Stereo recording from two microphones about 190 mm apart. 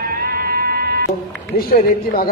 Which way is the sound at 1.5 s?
50° left (ahead or behind).